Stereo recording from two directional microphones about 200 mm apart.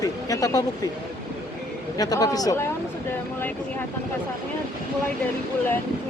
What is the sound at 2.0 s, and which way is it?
Speech, 20° left (ahead or behind).